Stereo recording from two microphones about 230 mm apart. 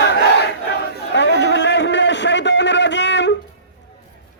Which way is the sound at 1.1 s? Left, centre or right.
Left.